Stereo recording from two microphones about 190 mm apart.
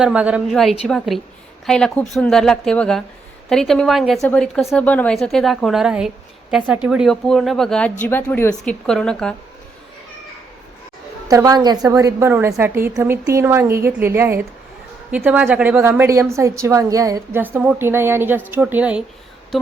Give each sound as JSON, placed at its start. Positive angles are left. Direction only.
{"t": 0.0, "sound": "a woman's voice", "side_deg": -5}
{"t": 11.3, "sound": "a woman's voice", "side_deg": -20}